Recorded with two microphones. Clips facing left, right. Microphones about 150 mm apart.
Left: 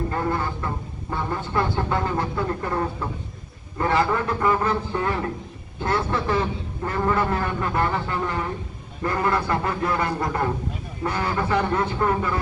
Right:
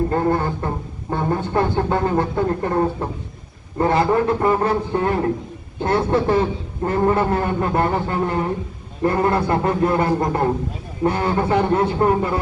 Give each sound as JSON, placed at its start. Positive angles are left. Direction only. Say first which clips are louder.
{"t": 0.1, "sound": "a man's voice", "louder": "right 6 dB", "side_deg": -40}